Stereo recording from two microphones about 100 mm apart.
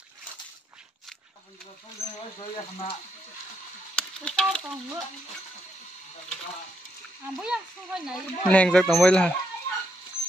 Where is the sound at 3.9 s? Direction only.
10° left (ahead or behind).